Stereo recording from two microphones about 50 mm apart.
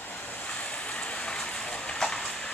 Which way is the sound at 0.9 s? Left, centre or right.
Left.